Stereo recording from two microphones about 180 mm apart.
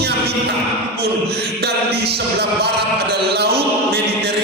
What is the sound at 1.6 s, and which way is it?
Music, 60° right (ahead or behind).